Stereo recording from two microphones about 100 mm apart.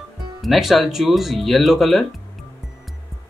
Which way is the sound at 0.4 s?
Centre (ahead or behind).